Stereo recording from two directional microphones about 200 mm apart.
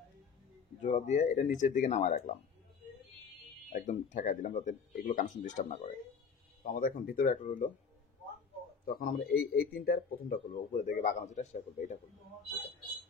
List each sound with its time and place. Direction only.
0.8 s speech: 35° left (ahead or behind)
3.7 s speech: 40° left (ahead or behind)
8.8 s speech: 45° left (ahead or behind)